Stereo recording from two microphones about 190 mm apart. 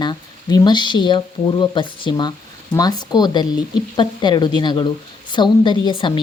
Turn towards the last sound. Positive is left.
turn(degrees=25)  # may be behind; listen again after turning